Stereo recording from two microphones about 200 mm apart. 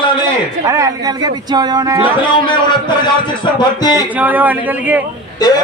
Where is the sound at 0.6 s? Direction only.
15° right (ahead or behind).